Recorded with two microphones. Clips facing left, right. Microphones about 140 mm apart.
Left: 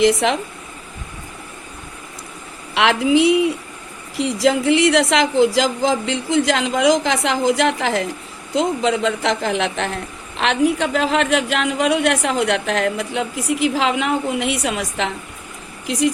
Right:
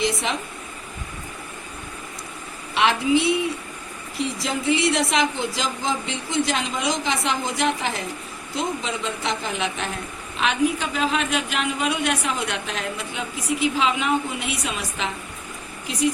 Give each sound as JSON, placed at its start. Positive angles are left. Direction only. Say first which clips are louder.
{"t": 0.0, "sound": "a woman's voice", "louder": "left 9 dB", "side_deg": 90}
{"t": 2.7, "sound": "a woman's voice", "louder": "left 4 dB", "side_deg": 90}
{"t": 15.9, "sound": "a woman's voice", "louder": "left 4 dB", "side_deg": 90}